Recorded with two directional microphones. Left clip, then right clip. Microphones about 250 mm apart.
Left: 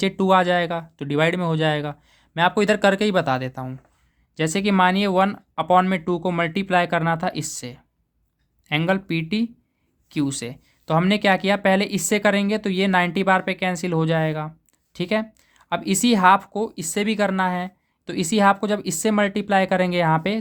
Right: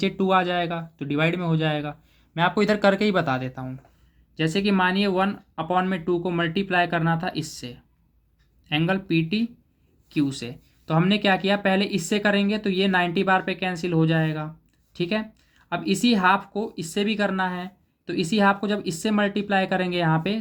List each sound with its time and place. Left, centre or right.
0.0 s speech: left